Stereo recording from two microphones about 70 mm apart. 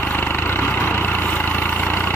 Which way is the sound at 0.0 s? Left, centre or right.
Left.